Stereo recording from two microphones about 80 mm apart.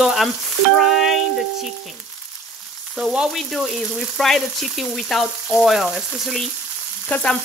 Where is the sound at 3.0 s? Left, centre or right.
Centre.